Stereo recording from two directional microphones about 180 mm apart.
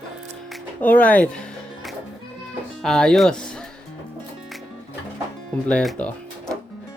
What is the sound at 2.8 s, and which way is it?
Speech, 5° left (ahead or behind).